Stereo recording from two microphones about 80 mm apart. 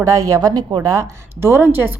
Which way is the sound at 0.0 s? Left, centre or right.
Right.